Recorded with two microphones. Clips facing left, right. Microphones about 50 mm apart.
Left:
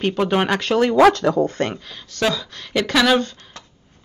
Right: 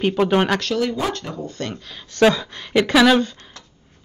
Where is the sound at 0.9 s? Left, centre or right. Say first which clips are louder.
Left 12 dB; left.